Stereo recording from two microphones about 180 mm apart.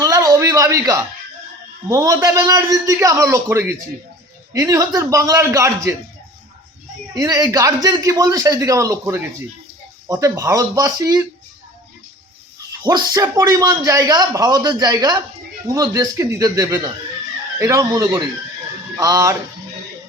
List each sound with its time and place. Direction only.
0.0 s a sound: 20° right (ahead or behind)
1.9 s a man's voice: 15° right (ahead or behind)
7.1 s a man's voice: 20° right (ahead or behind)
12.8 s a man's voice: 20° right (ahead or behind)